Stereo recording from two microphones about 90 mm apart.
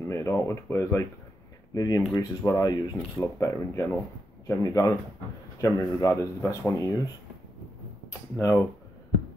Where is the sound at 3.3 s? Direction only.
30° left (ahead or behind).